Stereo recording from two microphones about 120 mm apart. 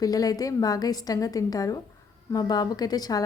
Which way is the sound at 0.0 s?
30° left (ahead or behind).